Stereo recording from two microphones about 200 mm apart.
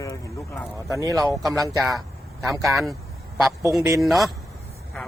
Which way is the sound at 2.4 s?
Centre (ahead or behind).